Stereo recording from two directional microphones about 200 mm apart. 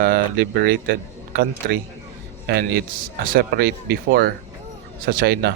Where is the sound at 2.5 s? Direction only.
55° right (ahead or behind).